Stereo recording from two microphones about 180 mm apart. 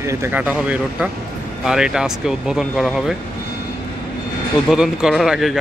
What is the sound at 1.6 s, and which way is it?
Speech, 5° right (ahead or behind).